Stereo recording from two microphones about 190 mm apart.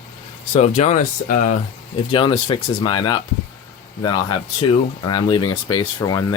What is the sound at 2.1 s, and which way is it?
Speech, 30° left (ahead or behind).